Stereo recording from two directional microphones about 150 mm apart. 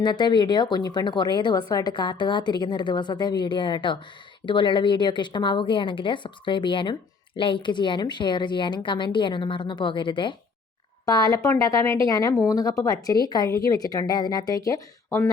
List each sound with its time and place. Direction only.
0.0 s a woman's voice: 30° left (ahead or behind)